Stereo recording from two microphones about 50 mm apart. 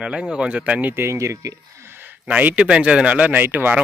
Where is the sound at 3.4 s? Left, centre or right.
Right.